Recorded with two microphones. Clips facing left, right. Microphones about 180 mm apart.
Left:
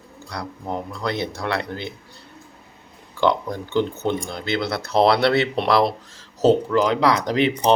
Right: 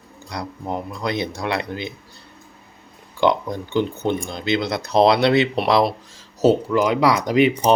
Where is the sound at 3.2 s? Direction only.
15° right (ahead or behind).